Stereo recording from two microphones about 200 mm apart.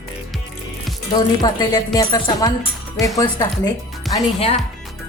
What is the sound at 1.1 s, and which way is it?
A woman's voice, 25° left (ahead or behind).